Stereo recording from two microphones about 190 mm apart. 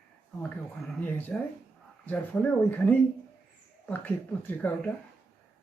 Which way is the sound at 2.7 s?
10° left (ahead or behind).